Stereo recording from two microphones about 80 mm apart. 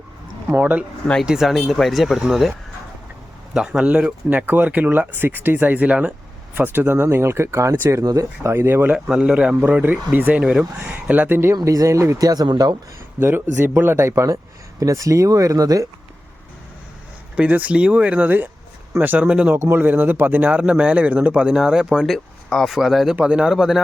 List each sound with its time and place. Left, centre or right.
0.5 s speech: right
1.2 s speech: centre
3.5 s speech: centre; by 9.0 s right
9.0 s speech: centre
9.6 s speech: right
11.6 s speech: right
13.1 s speech: right
17.3 s speech: centre
19.5 s speech: right; by 23.1 s centre
23.1 s speech: centre